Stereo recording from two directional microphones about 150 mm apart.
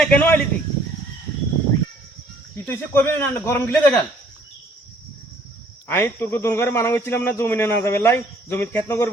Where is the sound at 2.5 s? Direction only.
15° left (ahead or behind).